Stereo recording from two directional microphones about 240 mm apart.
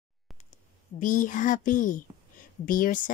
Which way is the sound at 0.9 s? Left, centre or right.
Left.